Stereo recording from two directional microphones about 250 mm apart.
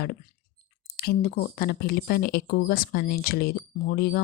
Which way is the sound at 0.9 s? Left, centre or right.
Left.